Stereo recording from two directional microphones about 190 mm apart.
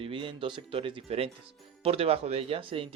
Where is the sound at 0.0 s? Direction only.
25° right (ahead or behind).